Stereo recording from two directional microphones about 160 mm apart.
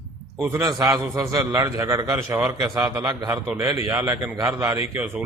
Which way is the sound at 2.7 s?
20° right (ahead or behind).